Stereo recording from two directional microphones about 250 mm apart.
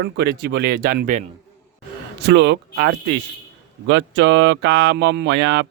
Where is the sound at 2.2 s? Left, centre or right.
Right.